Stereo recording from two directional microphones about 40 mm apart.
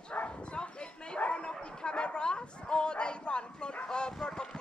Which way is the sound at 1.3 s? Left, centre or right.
Left.